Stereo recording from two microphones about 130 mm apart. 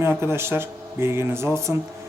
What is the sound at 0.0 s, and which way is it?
Speech, 20° right (ahead or behind).